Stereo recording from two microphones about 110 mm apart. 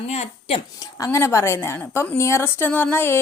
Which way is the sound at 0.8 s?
30° left (ahead or behind).